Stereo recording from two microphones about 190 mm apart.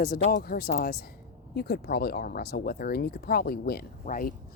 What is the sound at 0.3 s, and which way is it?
Speech, 50° left (ahead or behind).